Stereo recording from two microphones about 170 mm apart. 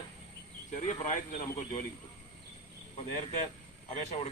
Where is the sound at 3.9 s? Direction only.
40° left (ahead or behind).